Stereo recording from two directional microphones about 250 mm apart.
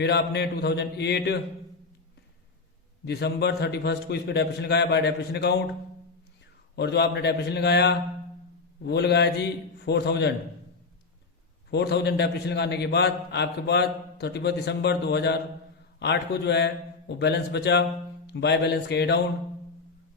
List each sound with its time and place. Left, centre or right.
0.0 s mantra: left
3.0 s a man's voice: left
6.7 s a man's voice: left
11.7 s a man's voice: left